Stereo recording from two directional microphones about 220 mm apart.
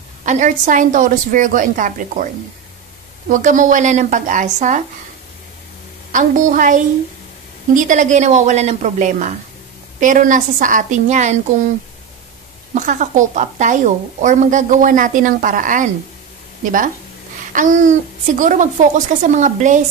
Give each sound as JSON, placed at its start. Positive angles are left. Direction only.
{"t": 0.2, "sound": "a woman's voice", "side_deg": -35}
{"t": 3.3, "sound": "a woman's voice", "side_deg": -35}
{"t": 6.1, "sound": "a woman's voice", "side_deg": -35}
{"t": 12.7, "sound": "a woman's voice", "side_deg": -35}
{"t": 17.5, "sound": "a woman's voice", "side_deg": -35}